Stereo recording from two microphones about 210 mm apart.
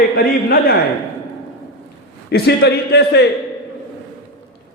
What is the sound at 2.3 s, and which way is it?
A man's voice, 50° left (ahead or behind).